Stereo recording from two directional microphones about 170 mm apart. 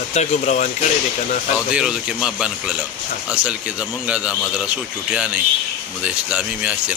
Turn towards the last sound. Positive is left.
turn(degrees=-5)  # may be behind; listen again after turning